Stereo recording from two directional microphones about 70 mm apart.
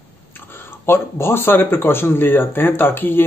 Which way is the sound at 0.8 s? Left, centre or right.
Left.